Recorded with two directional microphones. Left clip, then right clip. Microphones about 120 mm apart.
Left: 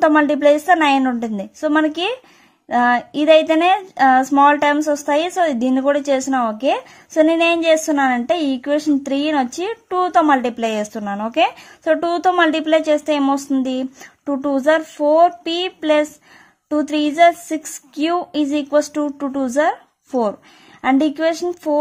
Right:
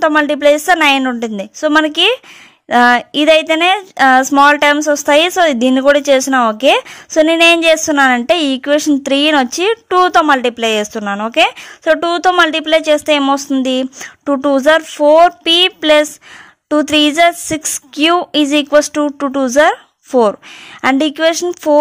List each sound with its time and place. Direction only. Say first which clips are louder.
0.0 s speech: right 3 dB; 25° right (ahead or behind)